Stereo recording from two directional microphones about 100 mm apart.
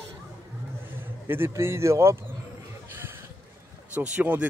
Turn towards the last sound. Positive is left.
turn(degrees=-15)  # may be behind; listen again after turning